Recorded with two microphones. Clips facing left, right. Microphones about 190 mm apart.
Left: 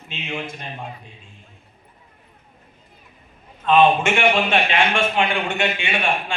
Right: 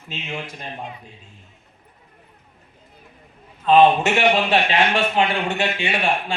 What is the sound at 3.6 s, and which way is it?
A man's voice, 35° right (ahead or behind).